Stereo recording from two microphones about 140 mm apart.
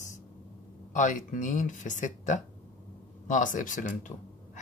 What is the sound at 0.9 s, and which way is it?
Speech, 60° left (ahead or behind).